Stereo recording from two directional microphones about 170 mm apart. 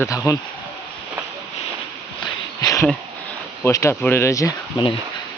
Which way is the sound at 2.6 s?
20° left (ahead or behind).